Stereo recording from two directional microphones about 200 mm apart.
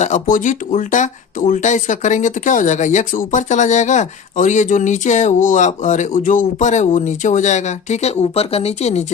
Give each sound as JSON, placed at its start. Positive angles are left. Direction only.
{"t": 0.0, "sound": "speech", "side_deg": 40}